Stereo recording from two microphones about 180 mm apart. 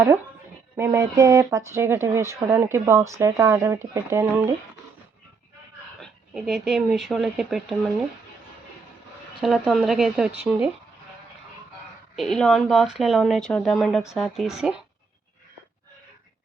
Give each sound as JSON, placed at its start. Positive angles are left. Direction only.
{"t": 0.8, "sound": "speech", "side_deg": -15}
{"t": 6.0, "sound": "speech", "side_deg": 0}
{"t": 9.4, "sound": "speech", "side_deg": 0}
{"t": 12.1, "sound": "speech", "side_deg": 0}